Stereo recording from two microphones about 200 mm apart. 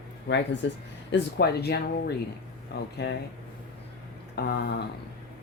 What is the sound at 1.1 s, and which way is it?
Speech, 55° left (ahead or behind).